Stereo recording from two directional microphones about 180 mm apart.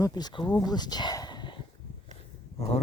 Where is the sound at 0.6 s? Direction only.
20° left (ahead or behind).